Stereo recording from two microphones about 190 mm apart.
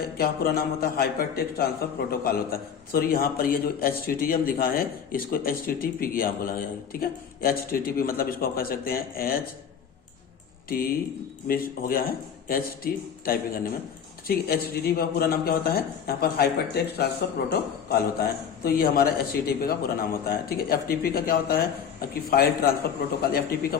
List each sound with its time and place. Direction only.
0.2 s a man's voice: 55° left (ahead or behind)
11.4 s a man's voice: 50° left (ahead or behind)